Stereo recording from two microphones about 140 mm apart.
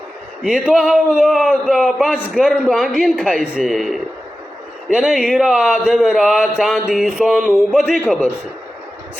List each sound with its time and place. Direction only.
0.4 s a man's voice: 5° right (ahead or behind)